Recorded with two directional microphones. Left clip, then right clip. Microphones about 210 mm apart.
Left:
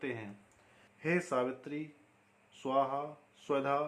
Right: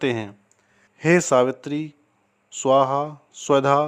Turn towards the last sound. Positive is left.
turn(degrees=-50)  # may be behind; listen again after turning